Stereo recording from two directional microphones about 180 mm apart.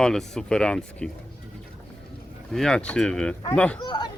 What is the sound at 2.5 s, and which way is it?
Speech, 5° left (ahead or behind).